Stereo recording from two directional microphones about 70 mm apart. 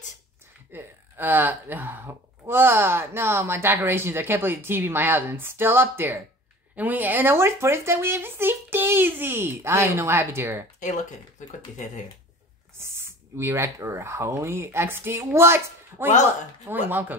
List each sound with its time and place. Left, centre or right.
0.7 s speech: right
12.7 s speech: right